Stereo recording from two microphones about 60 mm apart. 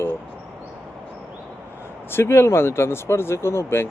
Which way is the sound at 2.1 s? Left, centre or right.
Left.